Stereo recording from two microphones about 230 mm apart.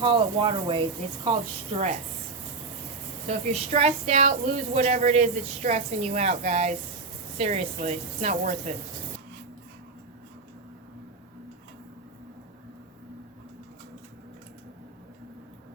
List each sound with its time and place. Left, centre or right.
0.0 s speech: right
3.2 s speech: right